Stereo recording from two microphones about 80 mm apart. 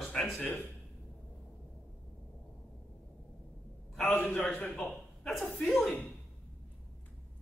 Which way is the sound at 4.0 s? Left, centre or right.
Centre.